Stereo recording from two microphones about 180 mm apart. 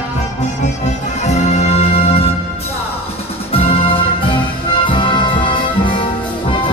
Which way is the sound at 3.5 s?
30° left (ahead or behind).